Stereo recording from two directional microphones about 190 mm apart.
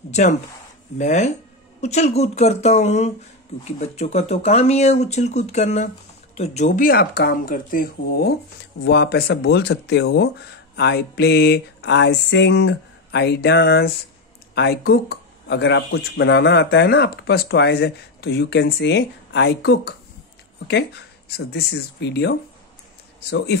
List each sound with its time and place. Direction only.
0.1 s speech: 40° left (ahead or behind); by 23.6 s 65° left (ahead or behind)